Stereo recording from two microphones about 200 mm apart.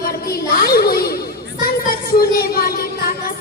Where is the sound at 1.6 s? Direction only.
50° left (ahead or behind).